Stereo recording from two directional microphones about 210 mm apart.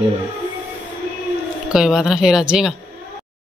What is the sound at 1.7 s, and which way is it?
Speech, 5° right (ahead or behind).